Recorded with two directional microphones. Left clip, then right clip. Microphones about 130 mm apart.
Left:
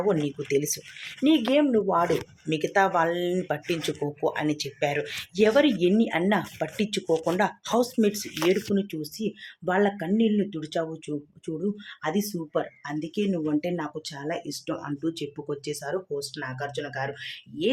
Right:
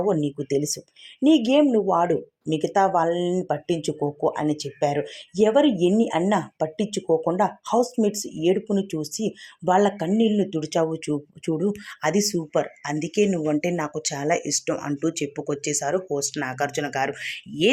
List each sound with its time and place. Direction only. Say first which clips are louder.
0.1 s speech: right 2 dB; 35° right (ahead or behind)